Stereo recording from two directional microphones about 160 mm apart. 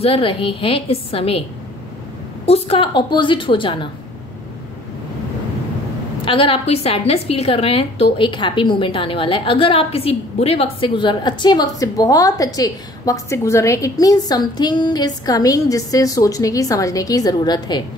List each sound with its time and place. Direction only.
0.0 s a woman's voice: 35° left (ahead or behind)
2.4 s a woman's voice: 35° left (ahead or behind)
6.2 s a woman's voice: 35° left (ahead or behind)